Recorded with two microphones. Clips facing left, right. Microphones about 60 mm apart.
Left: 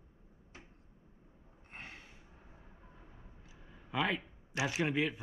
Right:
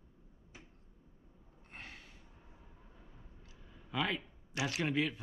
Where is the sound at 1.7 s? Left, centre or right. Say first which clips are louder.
Left 1 dB; centre.